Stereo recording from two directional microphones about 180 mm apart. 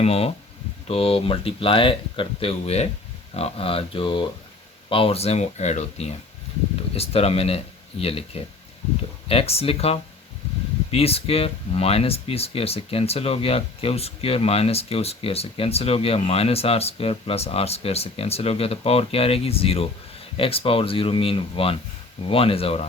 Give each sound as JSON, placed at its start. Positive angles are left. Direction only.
{"t": 0.0, "sound": "speech", "side_deg": 35}